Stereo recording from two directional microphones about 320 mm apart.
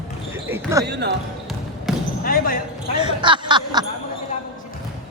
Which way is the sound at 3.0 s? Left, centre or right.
Centre.